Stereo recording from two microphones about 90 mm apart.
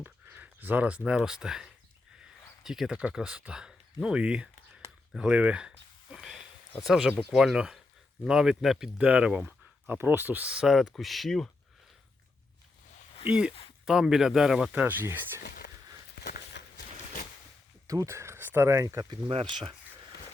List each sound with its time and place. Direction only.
0.0 s speech: 20° right (ahead or behind); by 11.5 s centre (ahead or behind)
13.2 s speech: 10° right (ahead or behind)
14.7 s speech: 20° right (ahead or behind)
17.8 s speech: 35° right (ahead or behind)
19.3 s speech: 90° right